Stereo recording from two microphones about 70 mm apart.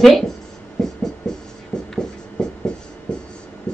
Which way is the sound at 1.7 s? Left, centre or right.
Centre.